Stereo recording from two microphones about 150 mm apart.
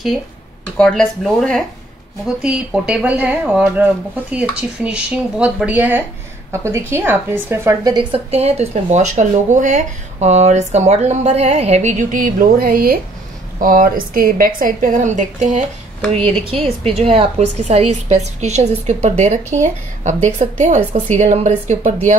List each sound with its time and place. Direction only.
0.7 s speech: 5° left (ahead or behind)
2.2 s speech: 5° right (ahead or behind)
7.8 s a woman's voice: 30° right (ahead or behind); by 15.6 s 55° right (ahead or behind)
16.4 s speech: 35° right (ahead or behind); by 21.9 s 55° right (ahead or behind)